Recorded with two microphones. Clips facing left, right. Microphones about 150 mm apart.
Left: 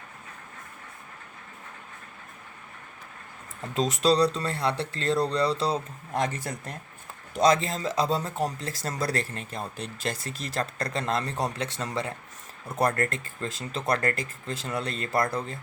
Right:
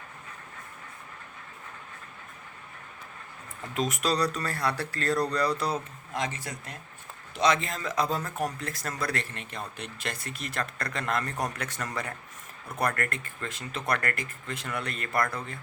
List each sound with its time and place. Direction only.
3.8 s speech: 30° left (ahead or behind)
6.1 s speech: 50° left (ahead or behind)
7.3 s speech: 40° left (ahead or behind)